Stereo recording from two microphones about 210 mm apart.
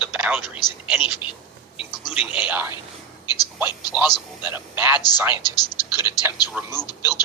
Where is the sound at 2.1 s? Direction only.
5° right (ahead or behind).